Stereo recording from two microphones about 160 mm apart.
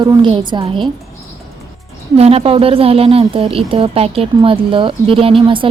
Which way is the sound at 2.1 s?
40° right (ahead or behind).